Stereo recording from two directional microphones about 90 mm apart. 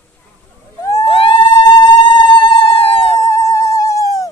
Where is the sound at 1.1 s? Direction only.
80° left.